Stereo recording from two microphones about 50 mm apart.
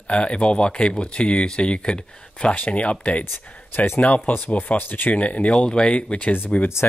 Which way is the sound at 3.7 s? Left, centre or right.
Left.